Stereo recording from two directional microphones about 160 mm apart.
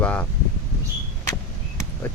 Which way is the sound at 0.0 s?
10° left (ahead or behind).